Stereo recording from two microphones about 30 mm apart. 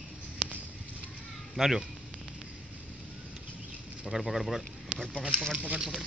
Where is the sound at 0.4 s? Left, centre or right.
Right.